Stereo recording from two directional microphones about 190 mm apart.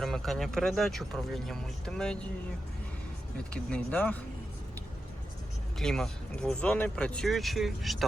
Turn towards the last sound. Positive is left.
turn(degrees=0)  # may be behind; listen again after turning